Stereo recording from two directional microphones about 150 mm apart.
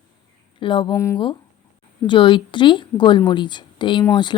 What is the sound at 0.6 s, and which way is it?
Speech, 35° left (ahead or behind).